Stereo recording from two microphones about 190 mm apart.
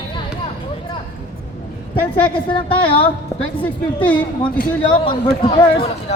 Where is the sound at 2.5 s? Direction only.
25° left (ahead or behind).